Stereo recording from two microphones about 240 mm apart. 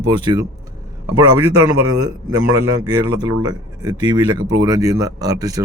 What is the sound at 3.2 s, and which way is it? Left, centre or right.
A man's voice, centre.